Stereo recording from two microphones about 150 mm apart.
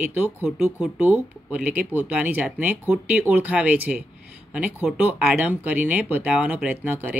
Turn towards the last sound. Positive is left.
turn(degrees=-10)  # may be behind; listen again after turning